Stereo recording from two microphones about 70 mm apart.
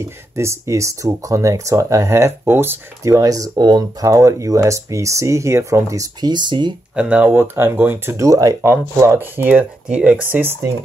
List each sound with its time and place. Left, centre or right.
0.0 s speech: right
3.0 s speech: right
4.1 s speech: right
6.2 s speech: right
7.0 s speech: centre
7.3 s speech: right
8.3 s speech: right
9.2 s speech: right
9.8 s speech: centre
10.2 s speech: right